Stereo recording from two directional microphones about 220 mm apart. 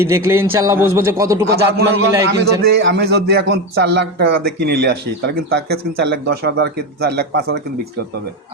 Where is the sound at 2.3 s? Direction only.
50° right (ahead or behind).